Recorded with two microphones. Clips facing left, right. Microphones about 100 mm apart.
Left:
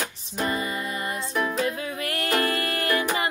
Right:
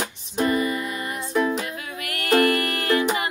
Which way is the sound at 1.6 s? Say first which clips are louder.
Left 4 dB; 30° left (ahead or behind).